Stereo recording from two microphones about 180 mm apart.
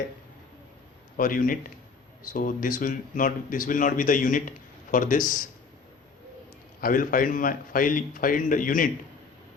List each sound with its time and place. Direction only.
1.1 s a man's voice: 50° left (ahead or behind)
6.8 s speech: 50° left (ahead or behind)